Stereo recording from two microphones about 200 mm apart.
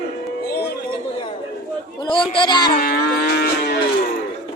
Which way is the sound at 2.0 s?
25° left (ahead or behind).